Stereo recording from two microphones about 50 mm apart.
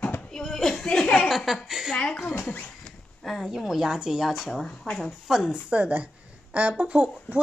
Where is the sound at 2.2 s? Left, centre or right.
Left.